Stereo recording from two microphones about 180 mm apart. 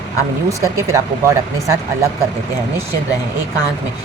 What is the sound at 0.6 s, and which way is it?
Speech, 15° right (ahead or behind).